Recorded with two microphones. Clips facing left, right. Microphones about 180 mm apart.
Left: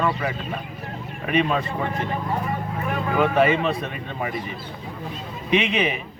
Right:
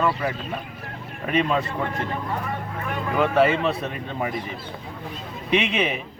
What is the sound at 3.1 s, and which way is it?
Speech, 5° left (ahead or behind).